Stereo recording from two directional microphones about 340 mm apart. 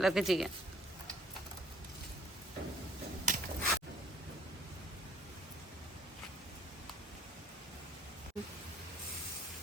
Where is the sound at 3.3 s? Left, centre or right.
Right.